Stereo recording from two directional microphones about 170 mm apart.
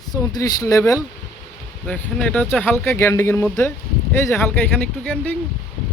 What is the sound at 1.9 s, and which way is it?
Speech, 5° left (ahead or behind).